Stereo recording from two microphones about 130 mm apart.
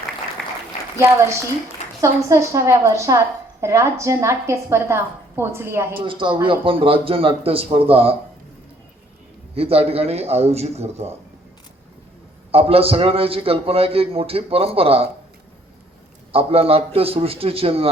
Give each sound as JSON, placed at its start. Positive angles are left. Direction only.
{"t": 0.9, "sound": "a woman's voice", "side_deg": -20}
{"t": 6.0, "sound": "a man's voice", "side_deg": -40}
{"t": 9.6, "sound": "a man's voice", "side_deg": -50}
{"t": 12.5, "sound": "a man's voice", "side_deg": -50}
{"t": 16.3, "sound": "a man's voice", "side_deg": -45}